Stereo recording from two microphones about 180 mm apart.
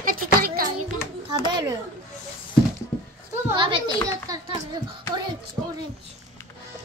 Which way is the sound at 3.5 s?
25° right (ahead or behind).